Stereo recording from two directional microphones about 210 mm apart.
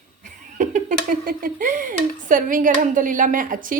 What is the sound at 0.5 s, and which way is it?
Speech, 40° right (ahead or behind).